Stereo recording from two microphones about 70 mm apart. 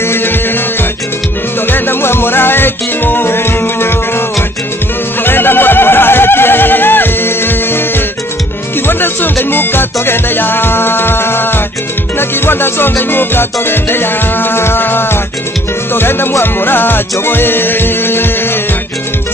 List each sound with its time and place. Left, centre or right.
0.0 s music: left
1.7 s music: left
5.2 s neigh: left
8.8 s music: left